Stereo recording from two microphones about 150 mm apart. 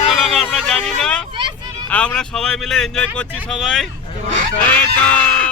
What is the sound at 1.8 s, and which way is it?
Speech, 5° left (ahead or behind).